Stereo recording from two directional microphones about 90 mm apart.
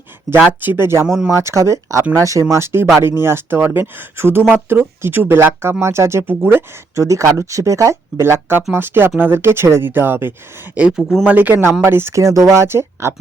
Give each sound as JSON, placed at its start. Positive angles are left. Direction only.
{"t": 0.4, "sound": "speech", "side_deg": -20}
{"t": 10.8, "sound": "speech", "side_deg": -10}
{"t": 11.2, "sound": "speech", "side_deg": -20}